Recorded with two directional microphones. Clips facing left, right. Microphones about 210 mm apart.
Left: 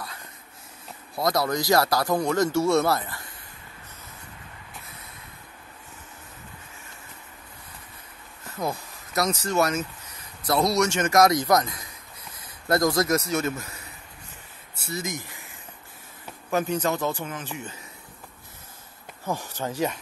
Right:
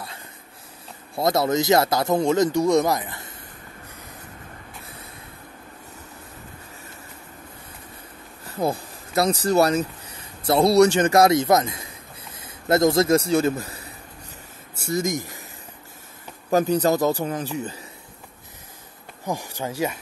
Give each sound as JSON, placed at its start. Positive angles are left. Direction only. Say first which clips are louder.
{"t": 1.1, "sound": "speech", "louder": "right 4 dB", "side_deg": -25}
{"t": 8.5, "sound": "a man's voice", "louder": "right 5 dB", "side_deg": -30}
{"t": 14.8, "sound": "speech", "louder": "right 8 dB", "side_deg": -50}
{"t": 16.4, "sound": "a man's voice", "louder": "right 6 dB", "side_deg": -35}
{"t": 19.2, "sound": "speech", "louder": "right 1 dB", "side_deg": -15}